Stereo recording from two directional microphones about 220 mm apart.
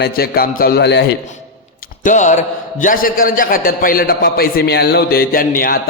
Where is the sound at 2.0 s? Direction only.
35° left (ahead or behind).